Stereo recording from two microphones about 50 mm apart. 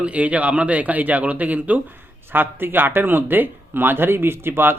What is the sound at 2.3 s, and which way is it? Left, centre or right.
A man's voice, right.